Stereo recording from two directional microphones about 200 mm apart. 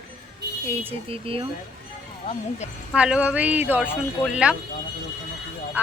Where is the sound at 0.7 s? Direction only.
30° right (ahead or behind).